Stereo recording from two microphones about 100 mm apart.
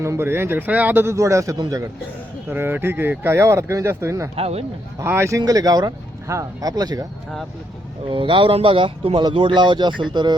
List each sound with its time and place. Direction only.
0.0 s a man's voice: 25° right (ahead or behind)
2.5 s a man's voice: 20° right (ahead or behind)
4.4 s a man's voice: 90° right
5.0 s a man's voice: 25° right (ahead or behind)
5.4 s speech: 40° right (ahead or behind)
8.1 s speech: 55° right (ahead or behind)